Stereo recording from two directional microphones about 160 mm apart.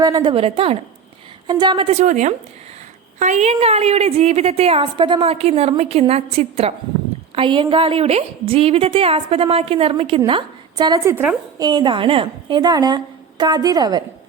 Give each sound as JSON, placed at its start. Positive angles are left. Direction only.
{"t": 0.0, "sound": "a woman's voice", "side_deg": -25}
{"t": 11.1, "sound": "a woman's voice", "side_deg": -10}
{"t": 11.5, "sound": "a woman's voice", "side_deg": -25}